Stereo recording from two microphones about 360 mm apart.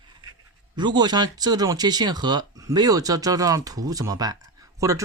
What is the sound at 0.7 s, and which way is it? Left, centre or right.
Speech, centre.